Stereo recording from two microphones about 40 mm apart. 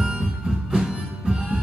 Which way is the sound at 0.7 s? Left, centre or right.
Centre.